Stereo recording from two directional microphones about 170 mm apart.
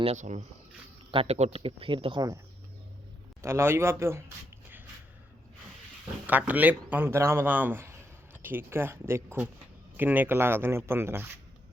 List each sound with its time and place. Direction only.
0.0 s speech: 40° right (ahead or behind); by 2.4 s 25° right (ahead or behind)
3.4 s a man's voice: 15° right (ahead or behind)
6.2 s a man's voice: 10° right (ahead or behind)